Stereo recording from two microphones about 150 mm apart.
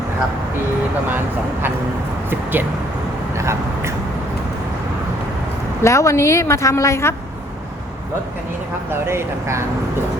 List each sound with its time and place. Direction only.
2.3 s speech: 15° right (ahead or behind)
3.3 s a sound: 20° right (ahead or behind)
5.8 s a woman's voice: 20° left (ahead or behind)
8.9 s speech: 15° right (ahead or behind)